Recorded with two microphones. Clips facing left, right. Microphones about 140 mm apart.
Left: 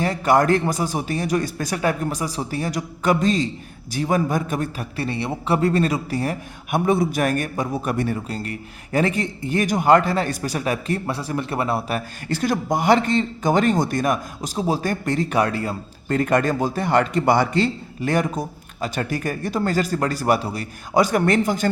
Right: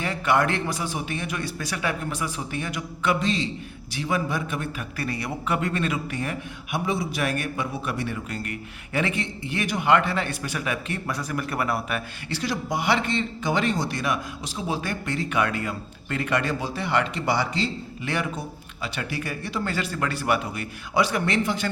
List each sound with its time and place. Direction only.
0.0 s a man's voice: 40° left (ahead or behind)
6.7 s a man's voice: 50° left (ahead or behind); by 12.0 s 30° left (ahead or behind)
12.3 s speech: 50° left (ahead or behind)